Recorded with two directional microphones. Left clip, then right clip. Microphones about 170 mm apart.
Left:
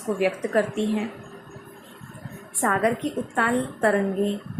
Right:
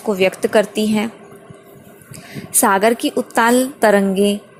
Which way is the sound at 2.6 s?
55° right (ahead or behind).